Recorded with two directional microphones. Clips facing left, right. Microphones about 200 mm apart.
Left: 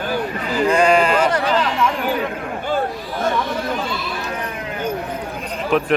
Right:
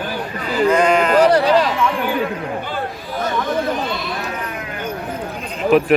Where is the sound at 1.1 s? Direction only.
35° right (ahead or behind).